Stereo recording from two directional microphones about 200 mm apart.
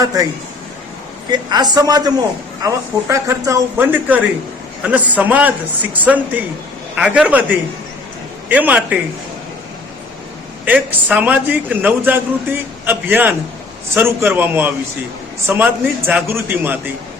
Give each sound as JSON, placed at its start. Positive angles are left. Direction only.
{"t": 0.0, "sound": "a man's voice", "side_deg": -15}
{"t": 1.3, "sound": "a woman's voice", "side_deg": -20}
{"t": 8.4, "sound": "a man's voice", "side_deg": -10}
{"t": 10.7, "sound": "a man's voice", "side_deg": -10}